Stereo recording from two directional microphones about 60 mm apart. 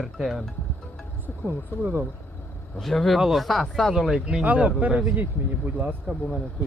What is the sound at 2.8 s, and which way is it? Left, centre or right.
Speech, centre.